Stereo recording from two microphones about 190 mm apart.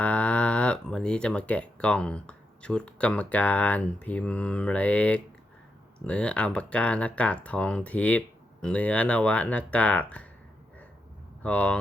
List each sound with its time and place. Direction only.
0.0 s speech: 5° left (ahead or behind)
11.4 s speech: 5° left (ahead or behind)